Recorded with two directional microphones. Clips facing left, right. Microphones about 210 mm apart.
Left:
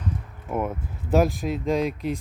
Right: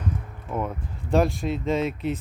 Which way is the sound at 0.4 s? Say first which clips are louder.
Left 2 dB; 10° left (ahead or behind).